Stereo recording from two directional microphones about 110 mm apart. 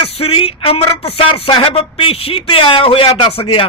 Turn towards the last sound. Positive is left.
turn(degrees=55)  # may be behind; listen again after turning